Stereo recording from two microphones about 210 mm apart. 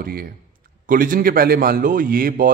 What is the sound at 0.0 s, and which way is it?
A man's voice, 45° right (ahead or behind).